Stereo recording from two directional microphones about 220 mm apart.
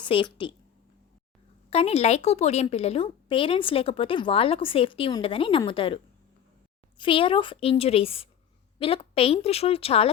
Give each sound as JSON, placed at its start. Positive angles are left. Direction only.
{"t": 0.0, "sound": "a woman's voice", "side_deg": 20}
{"t": 1.7, "sound": "a woman's voice", "side_deg": 25}
{"t": 7.0, "sound": "a woman's voice", "side_deg": 25}